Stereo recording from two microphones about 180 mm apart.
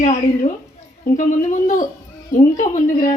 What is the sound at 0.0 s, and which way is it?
A woman's voice, 35° left (ahead or behind).